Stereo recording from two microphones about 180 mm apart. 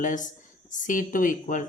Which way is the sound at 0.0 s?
45° left (ahead or behind).